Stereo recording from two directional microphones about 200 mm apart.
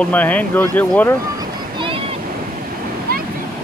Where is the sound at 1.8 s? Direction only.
25° right (ahead or behind).